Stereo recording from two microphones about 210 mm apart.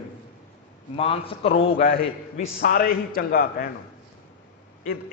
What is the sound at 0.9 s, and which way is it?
Speech, 25° left (ahead or behind).